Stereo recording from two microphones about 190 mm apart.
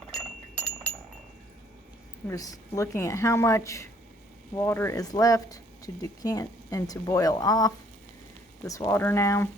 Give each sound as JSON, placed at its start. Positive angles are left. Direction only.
{"t": 0.5, "sound": "wind chime", "side_deg": 5}
{"t": 2.2, "sound": "a woman's voice", "side_deg": 20}